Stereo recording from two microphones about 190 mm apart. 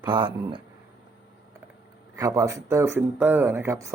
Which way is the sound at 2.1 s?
15° right (ahead or behind).